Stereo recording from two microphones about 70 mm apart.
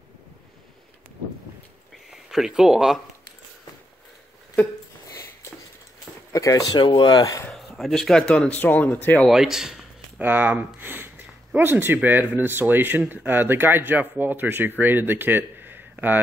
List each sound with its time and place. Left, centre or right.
2.0 s speech: centre
5.0 s a sound: left
6.3 s speech: left
7.5 s speech: centre
8.5 s speech: left
9.3 s a man's voice: centre
10.1 s speech: right